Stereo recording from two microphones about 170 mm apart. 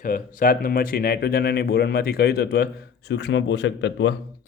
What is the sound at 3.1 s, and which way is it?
Speech, 90° left.